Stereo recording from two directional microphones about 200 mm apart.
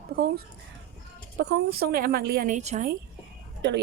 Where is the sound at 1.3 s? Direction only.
60° right (ahead or behind); by 2.9 s 35° right (ahead or behind).